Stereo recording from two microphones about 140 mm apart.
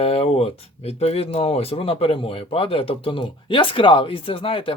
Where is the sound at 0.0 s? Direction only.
45° left (ahead or behind).